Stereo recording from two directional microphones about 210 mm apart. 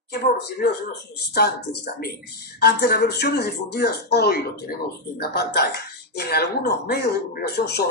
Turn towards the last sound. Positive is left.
turn(degrees=50)  # may be behind; listen again after turning